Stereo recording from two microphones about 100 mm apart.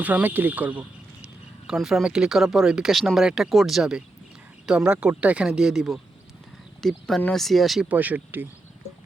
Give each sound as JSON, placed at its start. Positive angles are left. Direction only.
{"t": 0.0, "sound": "speech", "side_deg": -15}
{"t": 1.6, "sound": "speech", "side_deg": -5}
{"t": 7.9, "sound": "speech", "side_deg": -15}